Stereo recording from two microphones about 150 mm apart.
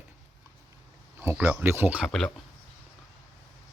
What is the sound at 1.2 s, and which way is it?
Speech, 10° right (ahead or behind).